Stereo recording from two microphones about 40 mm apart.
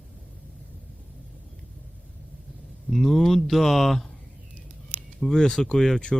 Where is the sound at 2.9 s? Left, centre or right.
Centre.